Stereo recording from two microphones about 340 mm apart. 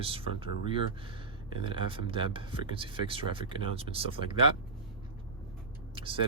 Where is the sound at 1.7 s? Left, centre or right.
Centre.